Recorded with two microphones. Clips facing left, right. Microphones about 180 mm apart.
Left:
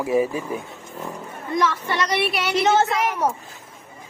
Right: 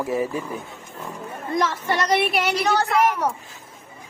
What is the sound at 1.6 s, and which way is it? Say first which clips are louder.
Speech: left 1 dB; 45° right (ahead or behind).